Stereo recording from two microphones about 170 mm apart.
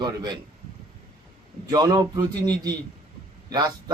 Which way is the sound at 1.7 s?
20° right (ahead or behind).